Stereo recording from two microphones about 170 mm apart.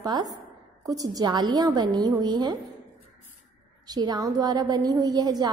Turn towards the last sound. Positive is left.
turn(degrees=-25)  # may be behind; listen again after turning